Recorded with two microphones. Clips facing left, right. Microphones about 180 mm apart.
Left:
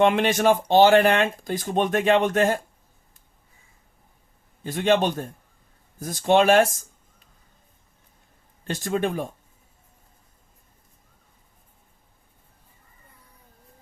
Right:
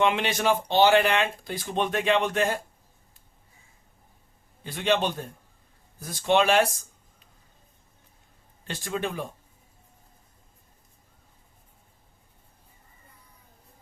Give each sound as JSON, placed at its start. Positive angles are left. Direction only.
{"t": 0.0, "sound": "speech", "side_deg": 45}
{"t": 4.6, "sound": "speech", "side_deg": 45}
{"t": 8.6, "sound": "speech", "side_deg": 45}